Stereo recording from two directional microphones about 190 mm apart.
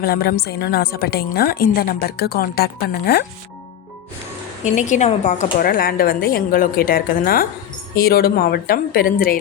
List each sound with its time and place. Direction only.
0.0 s a woman's voice: 55° left (ahead or behind)
4.6 s a woman's voice: 40° left (ahead or behind)